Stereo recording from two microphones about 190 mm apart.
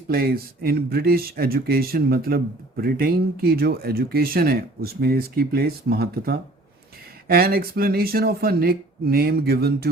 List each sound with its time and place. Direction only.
0.1 s speech: 50° right (ahead or behind)